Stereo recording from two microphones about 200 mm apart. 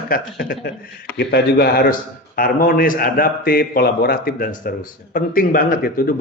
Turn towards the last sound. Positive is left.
turn(degrees=45)  # may be behind; listen again after turning